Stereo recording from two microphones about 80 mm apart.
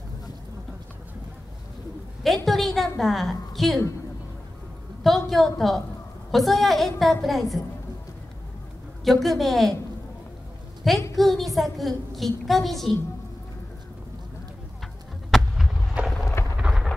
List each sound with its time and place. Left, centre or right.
2.4 s a woman's voice: centre
5.0 s a woman's voice: centre
9.0 s a woman's voice: centre
10.8 s a woman's voice: centre
15.3 s a sound: centre
16.0 s a sound: centre